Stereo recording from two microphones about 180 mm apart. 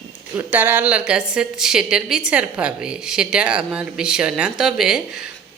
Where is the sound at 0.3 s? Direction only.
10° right (ahead or behind).